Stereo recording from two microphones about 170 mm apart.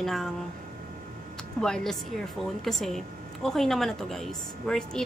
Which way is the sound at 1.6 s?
Centre (ahead or behind).